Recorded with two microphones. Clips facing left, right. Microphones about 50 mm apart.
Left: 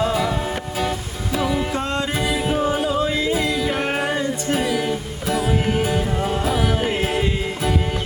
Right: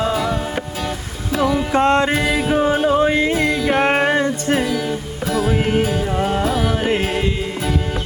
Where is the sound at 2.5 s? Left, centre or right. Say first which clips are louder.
Right 6 dB; right.